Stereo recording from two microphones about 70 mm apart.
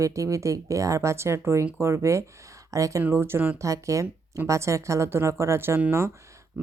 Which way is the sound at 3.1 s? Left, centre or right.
Right.